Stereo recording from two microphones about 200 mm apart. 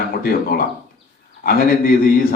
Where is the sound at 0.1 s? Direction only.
50° left (ahead or behind).